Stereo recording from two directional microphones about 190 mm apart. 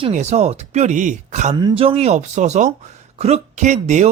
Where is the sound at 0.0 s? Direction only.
35° right (ahead or behind).